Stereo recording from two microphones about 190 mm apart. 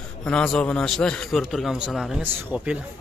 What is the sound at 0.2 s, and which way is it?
A man's voice, 5° left (ahead or behind).